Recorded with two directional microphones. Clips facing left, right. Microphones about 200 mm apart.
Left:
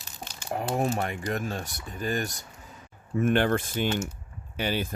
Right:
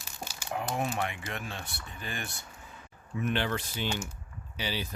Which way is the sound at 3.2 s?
50° left (ahead or behind).